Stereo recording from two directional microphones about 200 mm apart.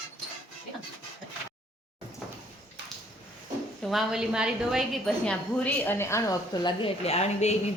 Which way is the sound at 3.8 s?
Centre (ahead or behind).